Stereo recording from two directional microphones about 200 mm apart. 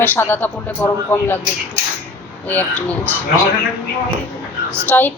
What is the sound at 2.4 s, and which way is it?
Speech, 10° left (ahead or behind).